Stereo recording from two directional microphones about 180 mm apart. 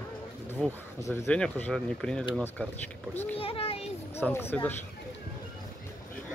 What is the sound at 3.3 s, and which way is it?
Speech, 30° left (ahead or behind).